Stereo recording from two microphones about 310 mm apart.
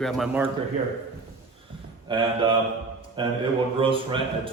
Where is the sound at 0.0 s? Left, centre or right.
Centre.